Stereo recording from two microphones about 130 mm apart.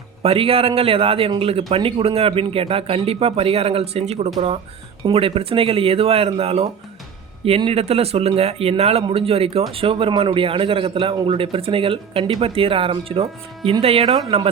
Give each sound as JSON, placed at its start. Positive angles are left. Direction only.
{"t": 0.2, "sound": "a man's voice", "side_deg": -50}